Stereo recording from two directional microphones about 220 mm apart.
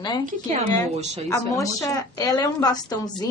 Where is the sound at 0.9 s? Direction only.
30° right (ahead or behind).